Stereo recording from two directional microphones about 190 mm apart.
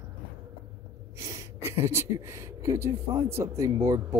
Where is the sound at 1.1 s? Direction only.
15° right (ahead or behind).